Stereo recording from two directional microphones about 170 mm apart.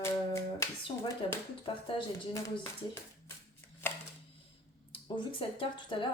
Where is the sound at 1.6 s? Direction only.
30° left (ahead or behind).